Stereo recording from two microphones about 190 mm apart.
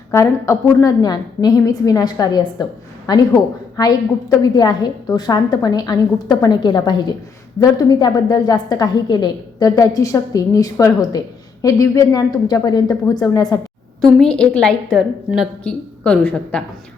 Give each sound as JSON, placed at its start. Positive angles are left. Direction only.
{"t": 0.1, "sound": "a woman's voice", "side_deg": 15}
{"t": 14.2, "sound": "a woman's voice", "side_deg": 5}